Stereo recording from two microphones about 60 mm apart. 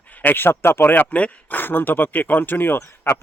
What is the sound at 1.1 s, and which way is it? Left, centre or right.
Speech, left.